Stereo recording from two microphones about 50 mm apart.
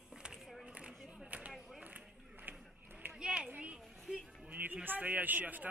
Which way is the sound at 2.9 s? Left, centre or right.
Right.